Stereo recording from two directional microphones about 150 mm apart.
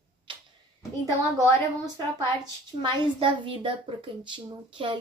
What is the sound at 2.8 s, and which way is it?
A woman's voice, 35° right (ahead or behind).